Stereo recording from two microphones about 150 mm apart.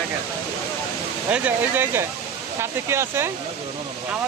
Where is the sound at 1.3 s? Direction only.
10° right (ahead or behind).